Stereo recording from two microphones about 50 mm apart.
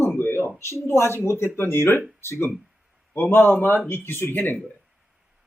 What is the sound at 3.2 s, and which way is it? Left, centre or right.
Speech, left.